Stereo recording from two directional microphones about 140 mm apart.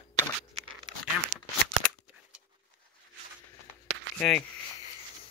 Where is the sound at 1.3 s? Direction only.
70° right (ahead or behind).